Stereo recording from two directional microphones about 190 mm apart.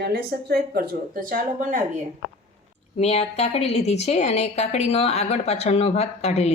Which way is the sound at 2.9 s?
35° left (ahead or behind).